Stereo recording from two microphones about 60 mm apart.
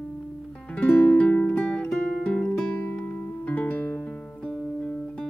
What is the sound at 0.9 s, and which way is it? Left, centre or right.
Music, left.